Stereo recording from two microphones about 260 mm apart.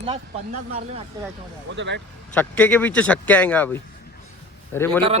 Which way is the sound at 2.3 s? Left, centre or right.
Centre.